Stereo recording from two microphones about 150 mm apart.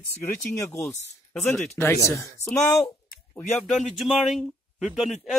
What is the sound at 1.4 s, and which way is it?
Speech, 5° left (ahead or behind).